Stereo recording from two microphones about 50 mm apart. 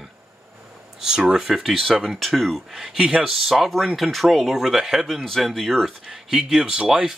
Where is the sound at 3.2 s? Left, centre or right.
Centre.